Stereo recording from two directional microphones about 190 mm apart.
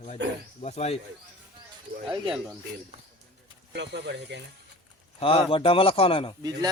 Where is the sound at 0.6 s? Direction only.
35° left (ahead or behind).